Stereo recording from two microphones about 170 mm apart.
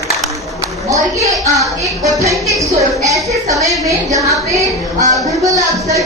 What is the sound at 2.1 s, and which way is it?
Speech, 20° right (ahead or behind).